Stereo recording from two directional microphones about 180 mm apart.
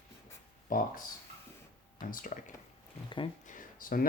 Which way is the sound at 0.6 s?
50° left (ahead or behind).